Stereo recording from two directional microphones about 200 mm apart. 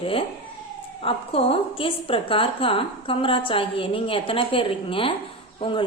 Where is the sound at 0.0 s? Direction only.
25° left (ahead or behind).